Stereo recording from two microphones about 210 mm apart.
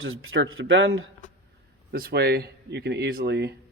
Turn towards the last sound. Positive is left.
turn(degrees=-50)  # may be behind; listen again after turning